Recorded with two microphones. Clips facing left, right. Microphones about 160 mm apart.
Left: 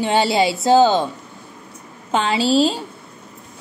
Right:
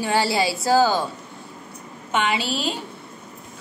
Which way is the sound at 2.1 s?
30° left (ahead or behind).